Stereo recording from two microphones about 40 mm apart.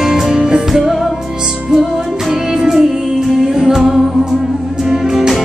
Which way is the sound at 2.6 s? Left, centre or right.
Centre.